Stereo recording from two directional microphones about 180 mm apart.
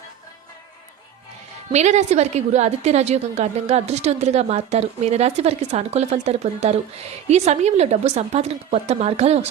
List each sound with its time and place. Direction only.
1.7 s a woman's voice: 40° right (ahead or behind)